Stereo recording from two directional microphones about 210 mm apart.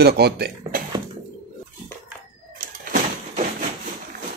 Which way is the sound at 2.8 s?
40° right (ahead or behind).